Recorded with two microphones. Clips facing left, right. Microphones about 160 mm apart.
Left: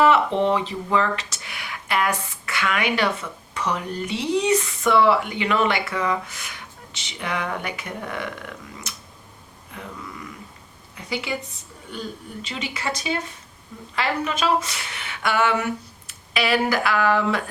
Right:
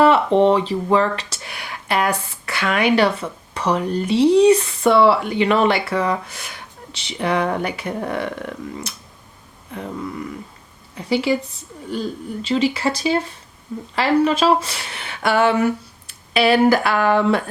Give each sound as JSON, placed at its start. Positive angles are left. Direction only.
{"t": 0.0, "sound": "speech", "side_deg": -35}
{"t": 10.9, "sound": "speech", "side_deg": -30}
{"t": 12.4, "sound": "speech", "side_deg": -30}